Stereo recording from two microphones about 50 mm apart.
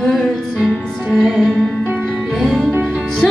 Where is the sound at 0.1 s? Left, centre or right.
Centre.